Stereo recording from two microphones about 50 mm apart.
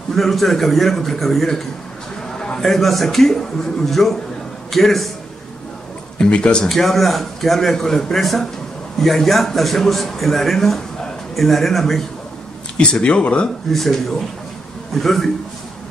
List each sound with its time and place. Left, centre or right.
0.1 s a man's voice: centre
6.1 s speech: centre
6.6 s a man's voice: centre
12.7 s speech: centre
13.7 s a man's voice: centre